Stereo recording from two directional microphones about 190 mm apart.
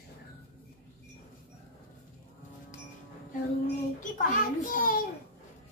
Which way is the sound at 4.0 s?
45° left (ahead or behind).